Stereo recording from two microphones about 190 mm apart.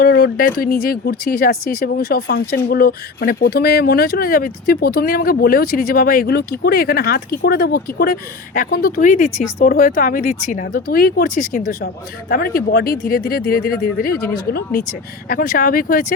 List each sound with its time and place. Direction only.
0.0 s speech: 50° left (ahead or behind)
12.3 s speech: 55° left (ahead or behind)